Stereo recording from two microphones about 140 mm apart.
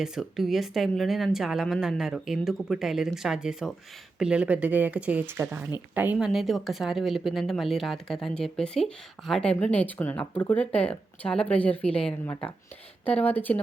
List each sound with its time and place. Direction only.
0.0 s speech: 5° right (ahead or behind)